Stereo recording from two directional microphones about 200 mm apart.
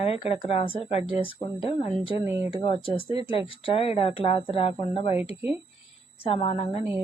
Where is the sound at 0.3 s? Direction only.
30° left (ahead or behind).